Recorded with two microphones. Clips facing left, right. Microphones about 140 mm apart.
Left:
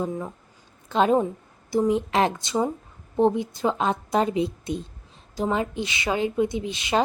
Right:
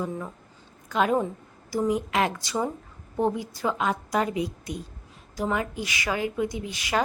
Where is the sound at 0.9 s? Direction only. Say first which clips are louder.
Left 3 dB; 30° left (ahead or behind).